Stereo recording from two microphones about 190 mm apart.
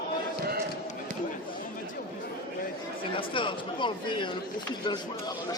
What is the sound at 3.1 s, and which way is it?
Chatter, 25° left (ahead or behind).